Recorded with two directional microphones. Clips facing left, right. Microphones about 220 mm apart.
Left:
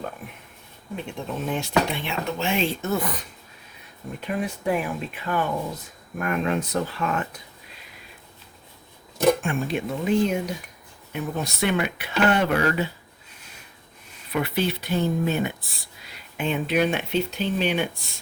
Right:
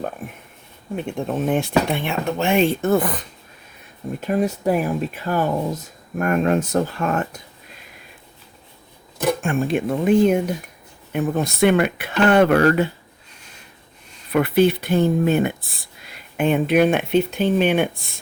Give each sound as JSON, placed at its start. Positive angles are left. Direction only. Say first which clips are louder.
{"t": 0.2, "sound": "speech", "louder": "right 6 dB", "side_deg": -45}
{"t": 4.2, "sound": "speech", "louder": "right 7 dB", "side_deg": -40}
{"t": 9.4, "sound": "speech", "louder": "right 5 dB", "side_deg": -50}
{"t": 14.3, "sound": "speech", "louder": "right 9 dB", "side_deg": -55}